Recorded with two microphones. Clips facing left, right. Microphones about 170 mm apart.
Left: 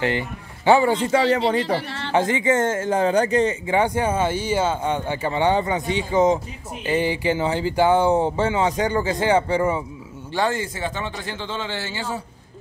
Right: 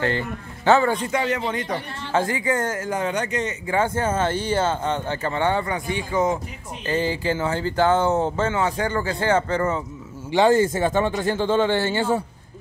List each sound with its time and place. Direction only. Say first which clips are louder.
0.0 s speech: left 1 dB; 15° left (ahead or behind)
0.9 s speech: left 5 dB; 30° left (ahead or behind)
1.9 s speech: left 3 dB; 85° left
2.1 s speech: left 3 dB; 20° left (ahead or behind)
3.7 s speech: even; 15° left (ahead or behind)
10.5 s speech: right 9 dB; 45° right (ahead or behind)